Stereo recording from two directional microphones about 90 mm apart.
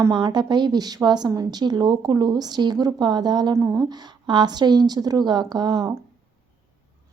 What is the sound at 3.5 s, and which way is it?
Speech, 35° right (ahead or behind).